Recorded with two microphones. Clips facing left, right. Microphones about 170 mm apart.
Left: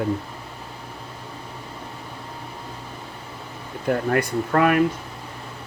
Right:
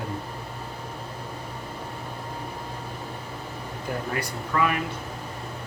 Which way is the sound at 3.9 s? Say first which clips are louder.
Left 10 dB; 60° left (ahead or behind).